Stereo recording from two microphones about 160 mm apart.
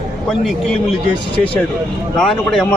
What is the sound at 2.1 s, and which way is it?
Speech, 5° left (ahead or behind).